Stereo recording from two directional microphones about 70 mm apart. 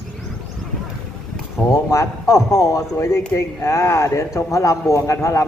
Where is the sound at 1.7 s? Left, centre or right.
Left.